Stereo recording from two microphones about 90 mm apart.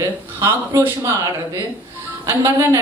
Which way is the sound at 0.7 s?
35° right (ahead or behind).